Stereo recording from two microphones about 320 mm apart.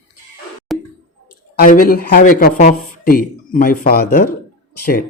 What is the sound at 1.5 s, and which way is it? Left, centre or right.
Speech, left.